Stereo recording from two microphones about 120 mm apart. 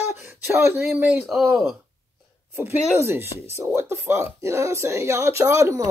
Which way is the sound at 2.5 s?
15° right (ahead or behind).